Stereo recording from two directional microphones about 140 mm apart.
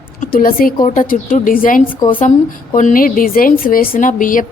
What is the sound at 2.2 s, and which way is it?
Speech, 60° left (ahead or behind).